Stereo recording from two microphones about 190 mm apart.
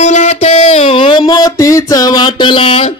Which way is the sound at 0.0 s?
40° left (ahead or behind).